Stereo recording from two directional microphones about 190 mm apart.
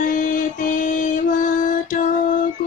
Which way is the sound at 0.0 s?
45° left (ahead or behind).